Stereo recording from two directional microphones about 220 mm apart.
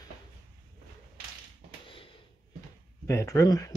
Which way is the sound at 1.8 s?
25° left (ahead or behind).